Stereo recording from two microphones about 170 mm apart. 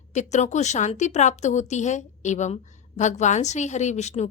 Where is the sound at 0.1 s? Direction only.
45° left (ahead or behind).